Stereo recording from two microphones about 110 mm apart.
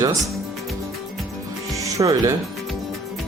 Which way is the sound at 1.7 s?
30° right (ahead or behind).